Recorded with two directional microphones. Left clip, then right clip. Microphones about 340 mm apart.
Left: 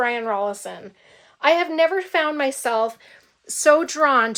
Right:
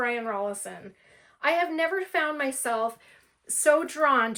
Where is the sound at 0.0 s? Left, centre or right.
Centre.